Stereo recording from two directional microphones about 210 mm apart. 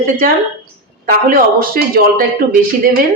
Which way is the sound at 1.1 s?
45° right (ahead or behind).